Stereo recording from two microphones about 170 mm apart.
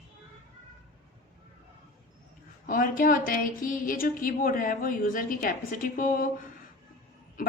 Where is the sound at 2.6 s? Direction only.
55° left (ahead or behind).